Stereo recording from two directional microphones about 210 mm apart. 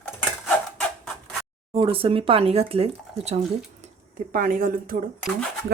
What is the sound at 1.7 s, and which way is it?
Speech, 25° right (ahead or behind).